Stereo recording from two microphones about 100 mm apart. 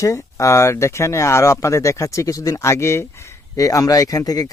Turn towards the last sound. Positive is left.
turn(degrees=40)  # may be behind; listen again after turning